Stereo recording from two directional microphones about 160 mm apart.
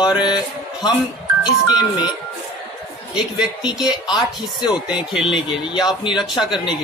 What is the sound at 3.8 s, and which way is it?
Speech, 30° left (ahead or behind).